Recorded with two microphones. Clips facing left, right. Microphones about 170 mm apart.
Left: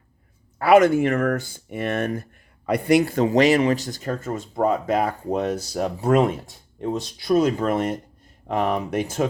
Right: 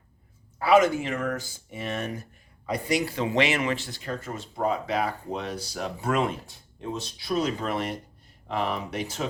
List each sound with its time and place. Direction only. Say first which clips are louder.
0.6 s speech: left 5 dB; 60° left (ahead or behind)